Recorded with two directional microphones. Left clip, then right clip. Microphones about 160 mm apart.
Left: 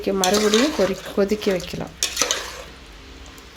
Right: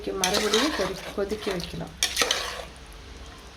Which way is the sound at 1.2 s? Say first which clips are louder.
Left 9 dB; 45° left (ahead or behind).